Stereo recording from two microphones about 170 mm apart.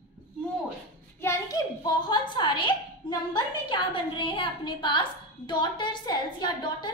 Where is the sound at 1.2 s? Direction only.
20° left (ahead or behind).